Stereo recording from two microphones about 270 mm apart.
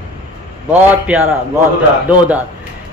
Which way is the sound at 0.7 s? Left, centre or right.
Centre.